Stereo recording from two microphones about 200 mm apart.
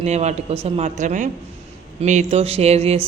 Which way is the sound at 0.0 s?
35° right (ahead or behind).